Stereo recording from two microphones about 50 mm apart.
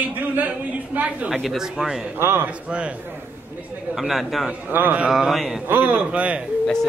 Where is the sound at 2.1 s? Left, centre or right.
Right.